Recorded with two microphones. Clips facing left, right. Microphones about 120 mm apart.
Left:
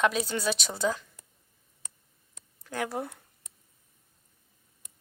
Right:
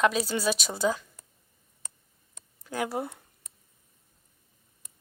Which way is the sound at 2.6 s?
5° right (ahead or behind).